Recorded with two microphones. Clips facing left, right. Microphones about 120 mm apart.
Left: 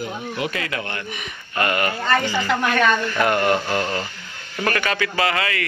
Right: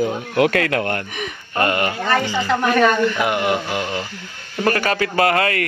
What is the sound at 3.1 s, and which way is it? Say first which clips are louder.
Speech: left 1 dB; 10° right (ahead or behind).